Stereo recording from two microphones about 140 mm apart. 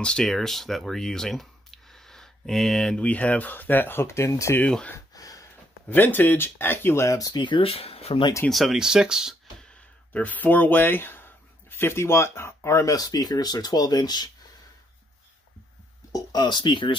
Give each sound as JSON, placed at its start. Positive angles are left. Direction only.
{"t": 0.0, "sound": "speech", "side_deg": 5}
{"t": 4.6, "sound": "speech", "side_deg": 5}
{"t": 4.9, "sound": "a sound", "side_deg": 25}
{"t": 5.9, "sound": "speech", "side_deg": 15}
{"t": 8.5, "sound": "speech", "side_deg": 0}
{"t": 9.7, "sound": "speech", "side_deg": 10}
{"t": 16.1, "sound": "speech", "side_deg": 25}